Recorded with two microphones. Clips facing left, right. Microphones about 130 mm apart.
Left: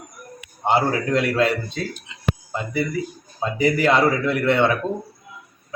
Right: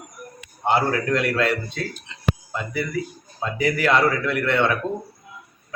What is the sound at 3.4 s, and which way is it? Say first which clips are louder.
A man's voice: left 3 dB; 25° left (ahead or behind).